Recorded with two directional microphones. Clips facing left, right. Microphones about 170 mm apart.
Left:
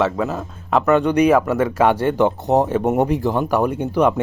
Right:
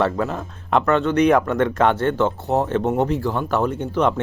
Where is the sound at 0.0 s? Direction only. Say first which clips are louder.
Left 1 dB; 5° left (ahead or behind).